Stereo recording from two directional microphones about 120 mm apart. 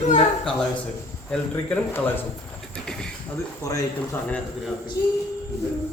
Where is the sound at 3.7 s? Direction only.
30° left (ahead or behind).